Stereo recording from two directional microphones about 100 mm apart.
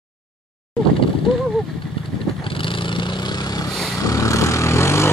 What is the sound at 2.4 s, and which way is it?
Vehicle, 60° left (ahead or behind).